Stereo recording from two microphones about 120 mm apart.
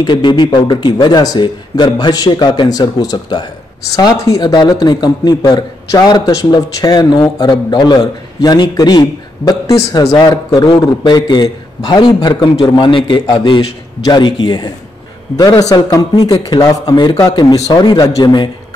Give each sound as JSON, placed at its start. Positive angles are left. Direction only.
{"t": 0.0, "sound": "a man's voice", "side_deg": 40}